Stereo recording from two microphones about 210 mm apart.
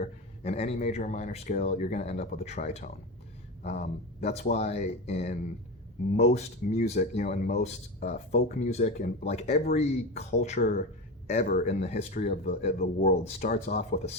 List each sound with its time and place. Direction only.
0.4 s speech: 30° left (ahead or behind)
12.8 s speech: 45° left (ahead or behind)